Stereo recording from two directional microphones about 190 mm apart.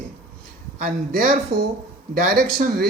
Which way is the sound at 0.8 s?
50° right (ahead or behind).